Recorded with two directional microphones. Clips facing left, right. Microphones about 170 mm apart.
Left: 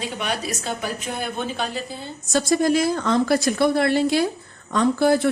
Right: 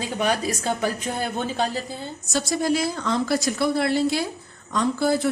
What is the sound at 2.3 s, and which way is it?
A woman's voice, 50° left (ahead or behind).